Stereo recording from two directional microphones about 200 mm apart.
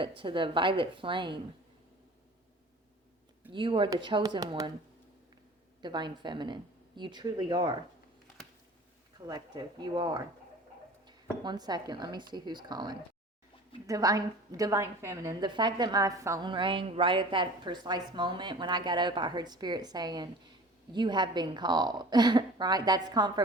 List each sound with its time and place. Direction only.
0.2 s a woman's voice: 25° right (ahead or behind)
3.5 s a woman's voice: 25° right (ahead or behind)
5.8 s a woman's voice: 20° right (ahead or behind)
9.1 s a woman's voice: 20° right (ahead or behind)